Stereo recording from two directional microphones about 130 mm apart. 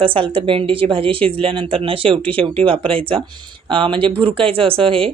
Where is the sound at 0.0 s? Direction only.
45° right (ahead or behind).